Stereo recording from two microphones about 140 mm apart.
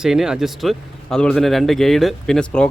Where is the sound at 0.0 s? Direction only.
5° right (ahead or behind).